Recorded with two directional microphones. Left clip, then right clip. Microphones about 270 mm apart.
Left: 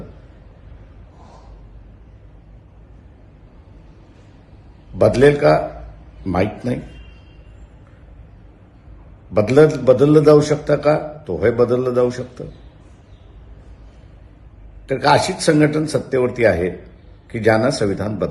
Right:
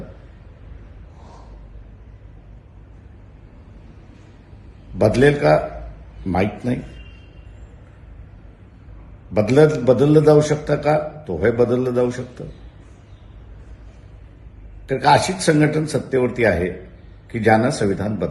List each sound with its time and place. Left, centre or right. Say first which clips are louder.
4.9 s a man's voice: left 3 dB; centre
9.3 s a man's voice: left 2 dB; centre
14.8 s a man's voice: even; centre